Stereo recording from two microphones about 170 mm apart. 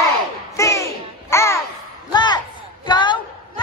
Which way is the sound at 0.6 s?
15° left (ahead or behind).